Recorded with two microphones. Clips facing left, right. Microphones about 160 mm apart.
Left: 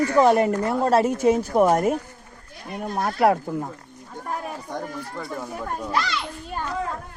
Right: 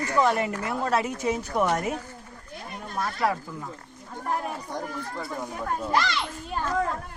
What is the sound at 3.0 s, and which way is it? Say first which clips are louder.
Speech: left 7 dB; 60° left (ahead or behind).